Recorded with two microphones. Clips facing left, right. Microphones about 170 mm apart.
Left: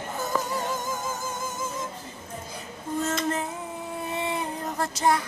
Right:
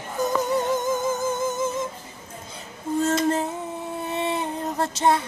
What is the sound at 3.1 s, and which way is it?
Female singing, 30° right (ahead or behind).